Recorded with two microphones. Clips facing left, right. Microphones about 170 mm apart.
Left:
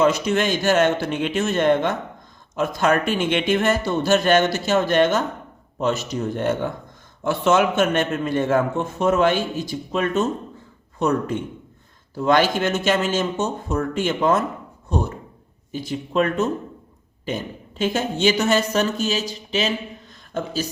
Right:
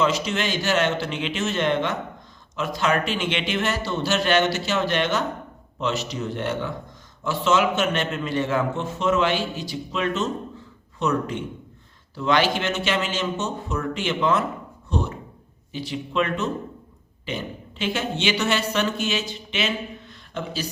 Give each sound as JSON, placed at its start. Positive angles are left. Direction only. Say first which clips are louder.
{"t": 0.0, "sound": "a man's voice", "louder": "left 4 dB", "side_deg": 50}